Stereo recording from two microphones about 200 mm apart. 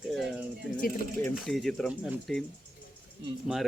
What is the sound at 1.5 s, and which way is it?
Speech, centre (ahead or behind).